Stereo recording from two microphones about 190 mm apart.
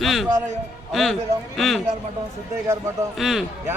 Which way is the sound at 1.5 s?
Centre (ahead or behind).